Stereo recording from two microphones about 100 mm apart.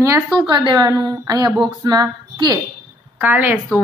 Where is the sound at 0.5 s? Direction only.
45° right (ahead or behind).